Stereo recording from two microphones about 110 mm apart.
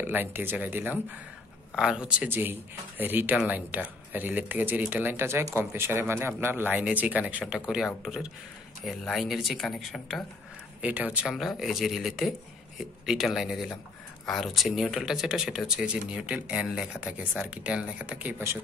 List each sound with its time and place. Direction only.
0.0 s speech: 15° right (ahead or behind); by 10.2 s 5° left (ahead or behind)
10.8 s speech: 15° right (ahead or behind)
11.3 s speech: centre (ahead or behind)